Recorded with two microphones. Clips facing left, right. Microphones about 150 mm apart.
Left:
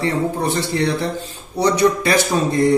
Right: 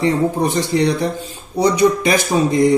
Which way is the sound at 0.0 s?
15° right (ahead or behind).